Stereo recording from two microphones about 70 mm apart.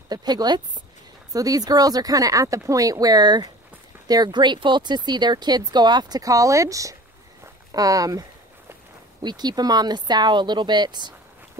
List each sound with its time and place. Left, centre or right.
0.1 s speech: right
1.3 s speech: right
9.2 s speech: right